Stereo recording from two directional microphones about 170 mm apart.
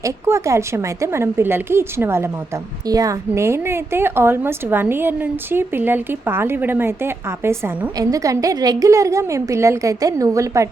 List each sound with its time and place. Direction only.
0.0 s a woman's voice: 15° right (ahead or behind)